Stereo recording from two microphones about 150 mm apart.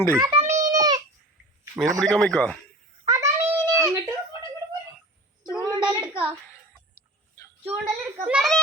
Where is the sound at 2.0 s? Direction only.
5° left (ahead or behind).